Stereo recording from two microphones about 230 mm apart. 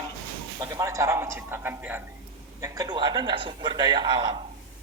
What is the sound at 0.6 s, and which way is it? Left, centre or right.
A man's voice, centre.